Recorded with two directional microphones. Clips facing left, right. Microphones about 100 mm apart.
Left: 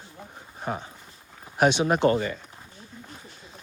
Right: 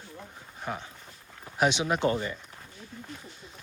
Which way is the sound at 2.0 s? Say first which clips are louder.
Left 5 dB; 75° left (ahead or behind).